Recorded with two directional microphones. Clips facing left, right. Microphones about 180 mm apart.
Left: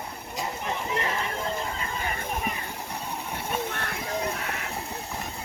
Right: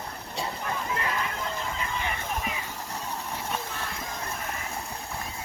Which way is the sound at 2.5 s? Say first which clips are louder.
Left 2 dB; 60° left (ahead or behind).